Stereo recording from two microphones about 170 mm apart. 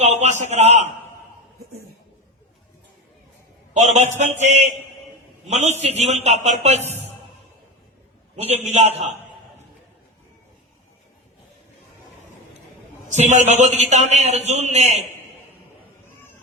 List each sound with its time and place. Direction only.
0.0 s a sound: 40° right (ahead or behind)
3.8 s a man's voice: 40° right (ahead or behind)
8.4 s a man's voice: 40° right (ahead or behind)
13.1 s a man's voice: 45° right (ahead or behind)